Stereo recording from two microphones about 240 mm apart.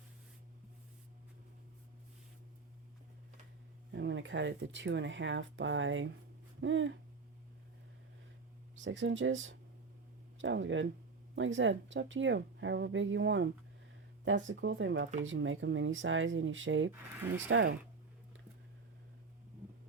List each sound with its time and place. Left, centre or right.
3.9 s speech: right
8.8 s speech: right